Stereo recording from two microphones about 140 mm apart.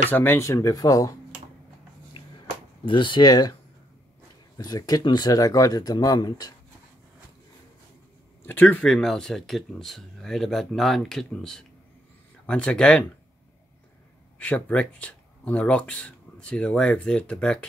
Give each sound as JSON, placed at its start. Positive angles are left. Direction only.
{"t": 0.1, "sound": "speech", "side_deg": 15}
{"t": 2.8, "sound": "speech", "side_deg": 35}
{"t": 4.6, "sound": "speech", "side_deg": 25}
{"t": 8.5, "sound": "speech", "side_deg": 10}
{"t": 14.4, "sound": "speech", "side_deg": 10}